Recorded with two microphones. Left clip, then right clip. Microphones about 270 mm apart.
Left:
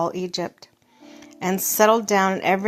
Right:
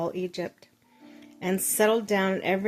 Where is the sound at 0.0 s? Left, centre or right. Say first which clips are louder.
Left 6 dB; centre.